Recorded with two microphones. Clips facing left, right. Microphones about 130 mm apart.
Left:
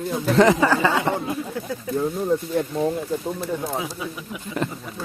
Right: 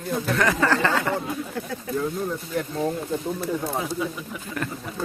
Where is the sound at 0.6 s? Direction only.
10° left (ahead or behind).